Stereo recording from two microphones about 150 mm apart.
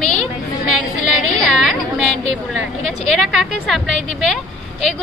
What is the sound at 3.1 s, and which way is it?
A woman's voice, centre (ahead or behind).